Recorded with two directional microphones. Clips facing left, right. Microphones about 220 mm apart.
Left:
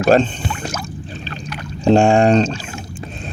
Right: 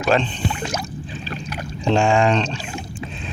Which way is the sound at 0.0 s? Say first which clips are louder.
Left 6 dB; 40° left (ahead or behind).